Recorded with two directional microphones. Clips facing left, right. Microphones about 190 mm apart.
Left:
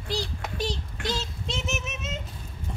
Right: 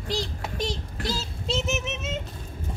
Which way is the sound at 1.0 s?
35° right (ahead or behind).